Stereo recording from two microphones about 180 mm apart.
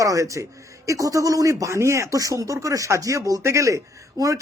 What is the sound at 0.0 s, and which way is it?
Speech, 20° right (ahead or behind).